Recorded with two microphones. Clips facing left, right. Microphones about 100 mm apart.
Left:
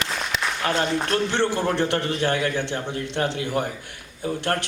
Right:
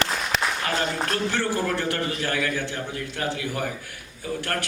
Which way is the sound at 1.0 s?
25° left (ahead or behind).